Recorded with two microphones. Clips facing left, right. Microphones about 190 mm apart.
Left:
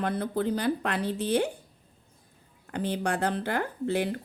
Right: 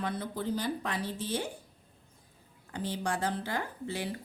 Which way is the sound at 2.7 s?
60° left (ahead or behind).